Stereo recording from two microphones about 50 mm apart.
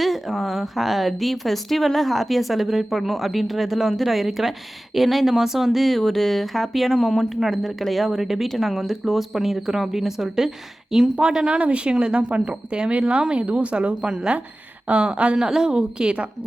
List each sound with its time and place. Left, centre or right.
0.0 s speech: centre
14.8 s speech: right
15.4 s a woman's voice: centre